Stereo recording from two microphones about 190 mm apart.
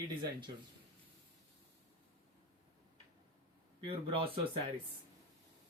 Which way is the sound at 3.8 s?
30° right (ahead or behind).